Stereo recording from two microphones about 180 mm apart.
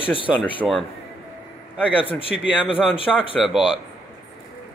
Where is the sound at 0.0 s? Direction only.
30° left (ahead or behind).